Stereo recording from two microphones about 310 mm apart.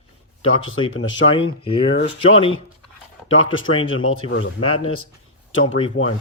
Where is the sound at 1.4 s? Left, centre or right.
Centre.